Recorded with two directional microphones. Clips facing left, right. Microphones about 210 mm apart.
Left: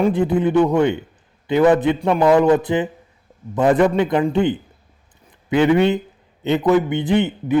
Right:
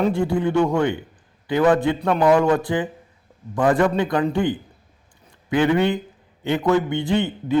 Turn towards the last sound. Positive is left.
turn(degrees=20)  # may be behind; listen again after turning